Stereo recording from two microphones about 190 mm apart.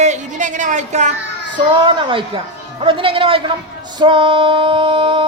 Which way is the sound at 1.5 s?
25° right (ahead or behind).